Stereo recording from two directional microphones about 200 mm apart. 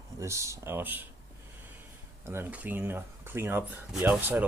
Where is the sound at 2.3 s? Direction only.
10° right (ahead or behind).